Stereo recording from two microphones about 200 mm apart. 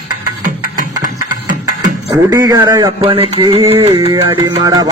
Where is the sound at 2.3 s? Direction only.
20° right (ahead or behind).